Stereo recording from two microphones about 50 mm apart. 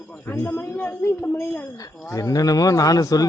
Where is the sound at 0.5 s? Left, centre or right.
Left.